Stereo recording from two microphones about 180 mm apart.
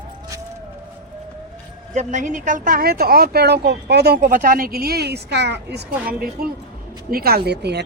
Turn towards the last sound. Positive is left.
turn(degrees=-65)  # may be behind; listen again after turning